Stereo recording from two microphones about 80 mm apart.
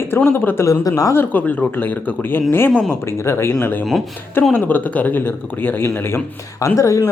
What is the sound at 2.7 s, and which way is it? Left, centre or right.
Speech, centre.